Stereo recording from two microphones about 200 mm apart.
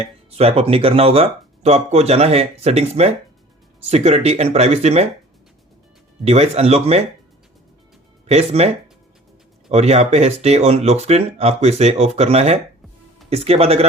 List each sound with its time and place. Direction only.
0.0 s speech: 30° right (ahead or behind)
6.2 s speech: 30° right (ahead or behind)
8.3 s speech: 30° right (ahead or behind)